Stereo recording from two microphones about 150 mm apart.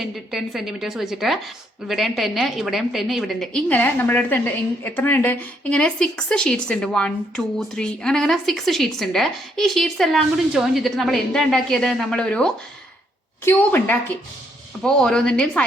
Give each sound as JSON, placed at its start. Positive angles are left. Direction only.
{"t": 0.0, "sound": "a woman's voice", "side_deg": 0}